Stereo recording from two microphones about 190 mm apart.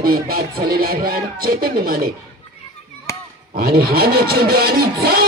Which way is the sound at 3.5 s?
55° right (ahead or behind).